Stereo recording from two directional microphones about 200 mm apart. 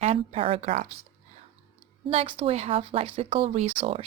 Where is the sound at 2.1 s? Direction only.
30° right (ahead or behind).